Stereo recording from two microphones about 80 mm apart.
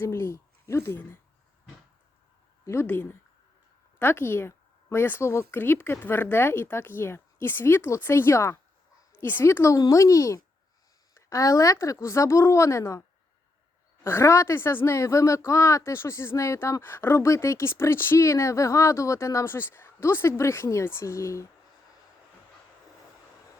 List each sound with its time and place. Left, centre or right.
0.0 s speech: left
2.8 s speech: left
9.7 s speech: left